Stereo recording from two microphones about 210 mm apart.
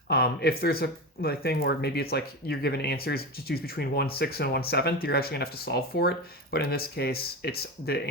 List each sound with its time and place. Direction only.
0.1 s speech: 50° left (ahead or behind)